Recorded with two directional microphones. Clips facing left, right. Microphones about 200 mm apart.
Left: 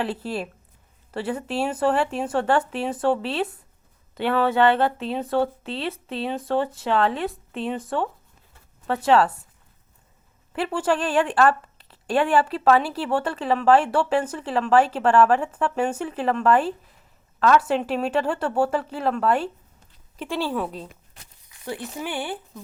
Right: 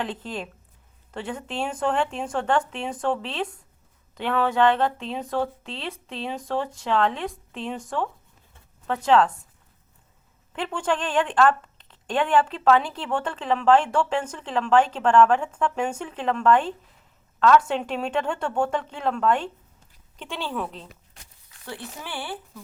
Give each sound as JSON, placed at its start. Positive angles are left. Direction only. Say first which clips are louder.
{"t": 0.0, "sound": "a woman's voice", "louder": "left 4 dB", "side_deg": 5}
{"t": 10.5, "sound": "a woman's voice", "louder": "left 3 dB", "side_deg": 5}